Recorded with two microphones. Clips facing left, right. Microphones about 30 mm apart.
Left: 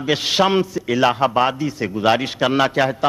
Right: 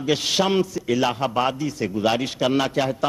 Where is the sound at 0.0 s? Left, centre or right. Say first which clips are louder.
Left 4 dB; left.